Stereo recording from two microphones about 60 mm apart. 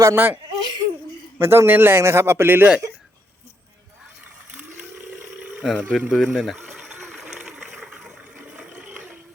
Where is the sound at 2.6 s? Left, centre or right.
Centre.